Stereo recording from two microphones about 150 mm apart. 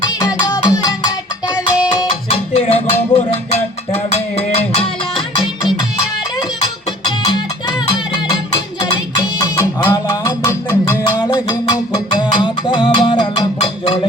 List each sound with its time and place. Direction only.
0.0 s music: 25° left (ahead or behind)
2.0 s music: 40° left (ahead or behind)
6.6 s music: 30° left (ahead or behind)